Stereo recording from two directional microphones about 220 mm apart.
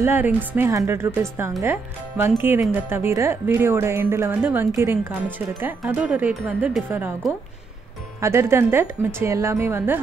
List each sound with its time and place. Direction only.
0.0 s speech: 10° right (ahead or behind)